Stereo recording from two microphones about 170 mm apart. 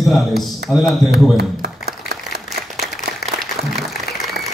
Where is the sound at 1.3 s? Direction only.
70° right (ahead or behind).